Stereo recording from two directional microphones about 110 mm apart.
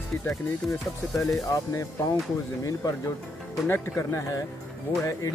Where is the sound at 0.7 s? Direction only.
5° left (ahead or behind).